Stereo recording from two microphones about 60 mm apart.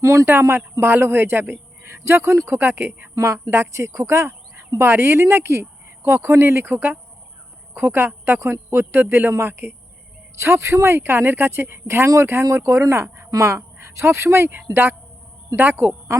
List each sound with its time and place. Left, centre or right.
0.0 s speech: right
0.3 s speech: right
2.5 s speech: right
3.2 s speech: right
6.7 s speech: right
10.4 s speech: right